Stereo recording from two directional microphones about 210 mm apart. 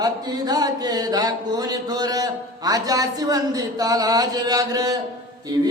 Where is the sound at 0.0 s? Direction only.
20° right (ahead or behind).